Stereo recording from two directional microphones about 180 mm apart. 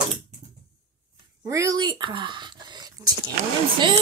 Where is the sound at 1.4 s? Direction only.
20° right (ahead or behind).